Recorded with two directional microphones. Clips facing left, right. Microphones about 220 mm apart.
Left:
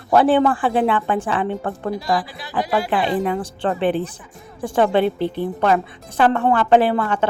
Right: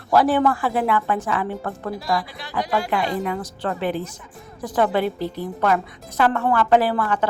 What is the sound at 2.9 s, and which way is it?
A woman's voice, 30° left (ahead or behind).